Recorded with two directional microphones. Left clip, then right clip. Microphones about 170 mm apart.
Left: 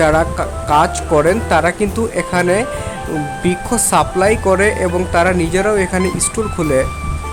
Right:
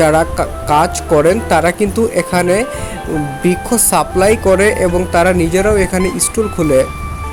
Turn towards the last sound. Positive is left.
turn(degrees=-5)  # may be behind; listen again after turning